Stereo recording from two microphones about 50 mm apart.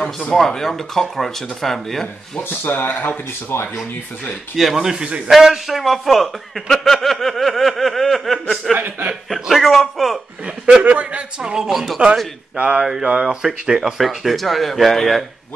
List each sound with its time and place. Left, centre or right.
0.3 s speech: centre
2.3 s speech: left
4.6 s speech: centre
5.3 s a man's voice: centre
8.7 s speech: right
9.3 s a man's voice: centre
10.8 s a man's voice: right
11.5 s speech: centre
12.5 s a man's voice: right; by 15.2 s centre